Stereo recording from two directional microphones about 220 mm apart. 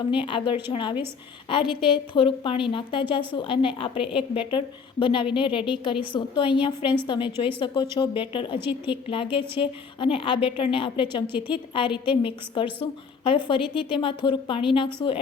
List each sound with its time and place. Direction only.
0.1 s a woman's voice: 20° left (ahead or behind)
1.6 s a woman's voice: centre (ahead or behind)
1.9 s a woman's voice: 25° left (ahead or behind)
8.5 s a woman's voice: 10° right (ahead or behind)
9.0 s a woman's voice: 25° left (ahead or behind)